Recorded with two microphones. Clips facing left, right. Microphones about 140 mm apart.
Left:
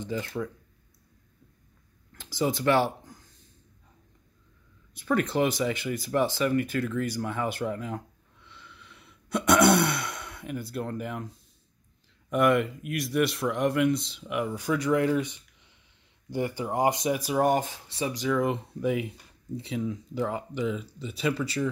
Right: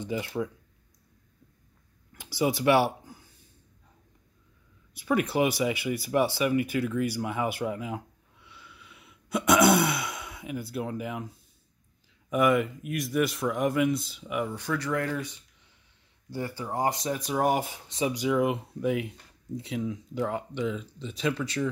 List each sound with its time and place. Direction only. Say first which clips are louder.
0.0 s speech: right 1 dB; 10° right (ahead or behind)
2.1 s speech: right 1 dB; 10° right (ahead or behind)
4.9 s speech: even; 10° right (ahead or behind)
14.5 s speech: left 4 dB; 10° left (ahead or behind)